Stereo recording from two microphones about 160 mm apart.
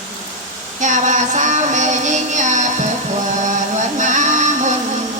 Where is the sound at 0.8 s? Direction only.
50° right (ahead or behind).